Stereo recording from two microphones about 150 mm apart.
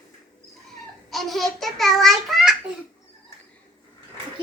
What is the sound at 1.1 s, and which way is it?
A man's voice, centre (ahead or behind).